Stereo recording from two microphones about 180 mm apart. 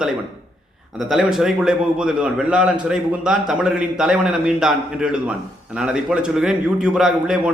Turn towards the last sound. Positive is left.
turn(degrees=-5)  # may be behind; listen again after turning